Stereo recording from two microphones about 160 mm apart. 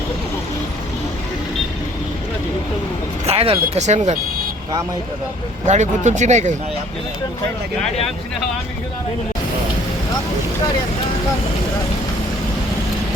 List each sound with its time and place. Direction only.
3.2 s speech: 40° right (ahead or behind)
5.6 s speech: 45° right (ahead or behind)